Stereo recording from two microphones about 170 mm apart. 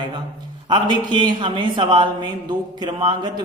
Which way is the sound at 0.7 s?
25° right (ahead or behind).